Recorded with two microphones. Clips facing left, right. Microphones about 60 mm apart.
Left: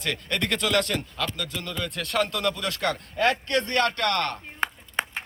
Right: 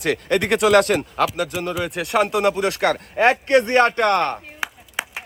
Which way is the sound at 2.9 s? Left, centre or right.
Right.